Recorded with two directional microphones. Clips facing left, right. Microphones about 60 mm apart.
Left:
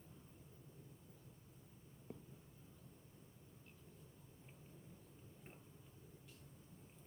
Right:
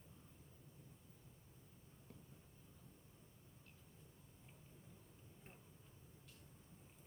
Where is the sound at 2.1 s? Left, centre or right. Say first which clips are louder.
Left 8 dB; centre.